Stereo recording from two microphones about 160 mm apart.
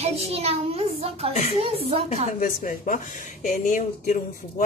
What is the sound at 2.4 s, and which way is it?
Speech, 55° left (ahead or behind).